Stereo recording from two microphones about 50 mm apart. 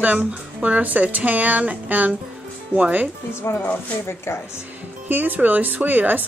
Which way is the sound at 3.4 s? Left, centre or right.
Left.